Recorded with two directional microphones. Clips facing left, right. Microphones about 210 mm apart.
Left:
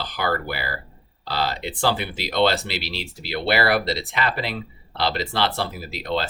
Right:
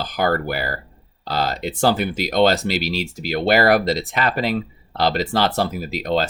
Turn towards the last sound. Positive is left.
turn(degrees=-45)  # may be behind; listen again after turning